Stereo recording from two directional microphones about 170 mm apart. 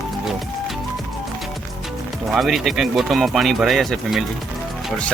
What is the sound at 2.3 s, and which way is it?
Speech, centre (ahead or behind).